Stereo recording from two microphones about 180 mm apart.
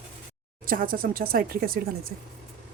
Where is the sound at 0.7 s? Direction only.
50° right (ahead or behind).